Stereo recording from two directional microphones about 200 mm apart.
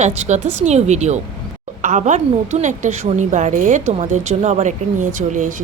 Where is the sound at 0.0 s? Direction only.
35° right (ahead or behind).